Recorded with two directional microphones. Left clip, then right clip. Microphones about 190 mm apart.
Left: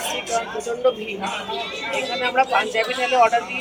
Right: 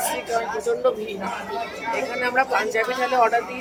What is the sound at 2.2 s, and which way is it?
Speech, centre (ahead or behind).